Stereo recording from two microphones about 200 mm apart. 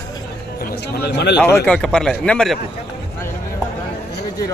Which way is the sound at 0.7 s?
55° left (ahead or behind).